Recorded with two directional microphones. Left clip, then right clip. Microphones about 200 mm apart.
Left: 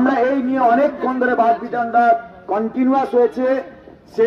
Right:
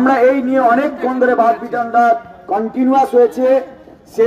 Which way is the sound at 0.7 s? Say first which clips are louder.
Left 2 dB; 40° right (ahead or behind).